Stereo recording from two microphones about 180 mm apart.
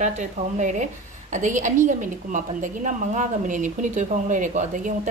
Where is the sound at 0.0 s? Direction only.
40° right (ahead or behind).